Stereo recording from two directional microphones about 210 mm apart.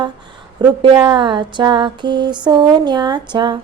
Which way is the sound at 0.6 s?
20° right (ahead or behind).